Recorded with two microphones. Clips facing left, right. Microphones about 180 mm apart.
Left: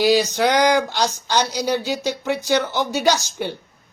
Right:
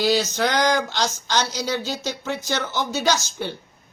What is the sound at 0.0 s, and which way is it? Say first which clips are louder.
Speech: left 4 dB; 15° left (ahead or behind).